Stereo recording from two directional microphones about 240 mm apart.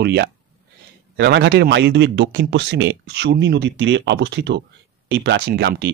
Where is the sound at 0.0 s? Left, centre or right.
Right.